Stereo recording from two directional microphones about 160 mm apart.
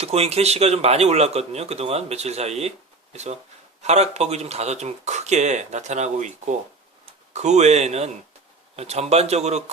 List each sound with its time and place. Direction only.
0.0 s speech: 40° right (ahead or behind)